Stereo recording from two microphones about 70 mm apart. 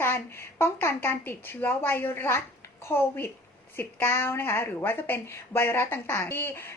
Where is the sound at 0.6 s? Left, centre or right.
Left.